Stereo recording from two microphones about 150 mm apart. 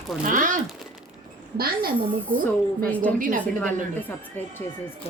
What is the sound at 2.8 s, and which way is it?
Speech, 10° left (ahead or behind).